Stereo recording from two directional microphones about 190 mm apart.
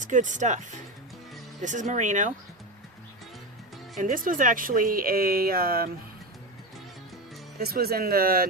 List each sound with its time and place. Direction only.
0.0 s speech: 40° right (ahead or behind)
1.6 s speech: 40° right (ahead or behind)
4.0 s speech: 45° right (ahead or behind)
7.6 s speech: 55° right (ahead or behind)